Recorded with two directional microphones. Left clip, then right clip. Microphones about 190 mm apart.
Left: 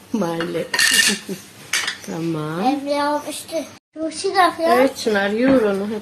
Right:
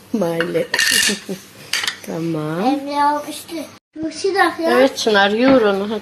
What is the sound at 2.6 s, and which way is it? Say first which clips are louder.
Child singing: right 3 dB; 20° left (ahead or behind).